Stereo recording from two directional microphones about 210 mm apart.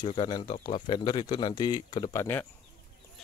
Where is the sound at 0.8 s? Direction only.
20° left (ahead or behind).